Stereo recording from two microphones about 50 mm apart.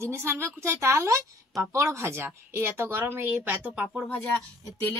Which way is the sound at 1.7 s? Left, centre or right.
Right.